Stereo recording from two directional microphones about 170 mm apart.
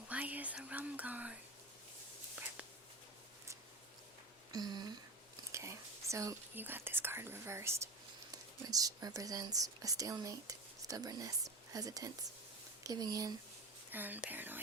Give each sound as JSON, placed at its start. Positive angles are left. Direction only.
{"t": 0.1, "sound": "speech", "side_deg": -10}
{"t": 4.5, "sound": "speech", "side_deg": -25}
{"t": 13.9, "sound": "speech", "side_deg": -10}